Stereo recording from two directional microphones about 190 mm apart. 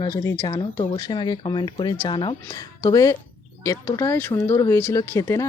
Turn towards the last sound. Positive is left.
turn(degrees=15)  # may be behind; listen again after turning